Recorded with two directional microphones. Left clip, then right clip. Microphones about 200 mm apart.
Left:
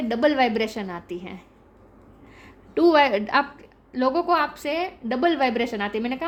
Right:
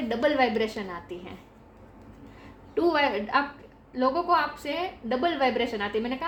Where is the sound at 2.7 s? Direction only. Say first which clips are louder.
Left 6 dB; 55° left (ahead or behind).